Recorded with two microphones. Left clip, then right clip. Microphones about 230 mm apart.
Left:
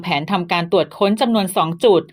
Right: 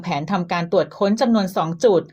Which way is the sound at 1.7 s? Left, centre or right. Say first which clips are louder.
Left 2 dB; centre.